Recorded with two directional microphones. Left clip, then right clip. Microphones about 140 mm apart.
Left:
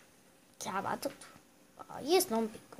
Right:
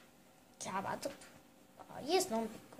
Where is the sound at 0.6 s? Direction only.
55° left (ahead or behind).